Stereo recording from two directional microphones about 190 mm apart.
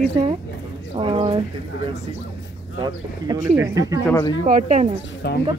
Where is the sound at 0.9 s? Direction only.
30° right (ahead or behind).